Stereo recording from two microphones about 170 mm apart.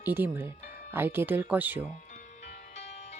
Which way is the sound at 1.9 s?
45° left (ahead or behind).